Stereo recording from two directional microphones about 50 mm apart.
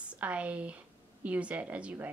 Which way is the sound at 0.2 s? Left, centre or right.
Right.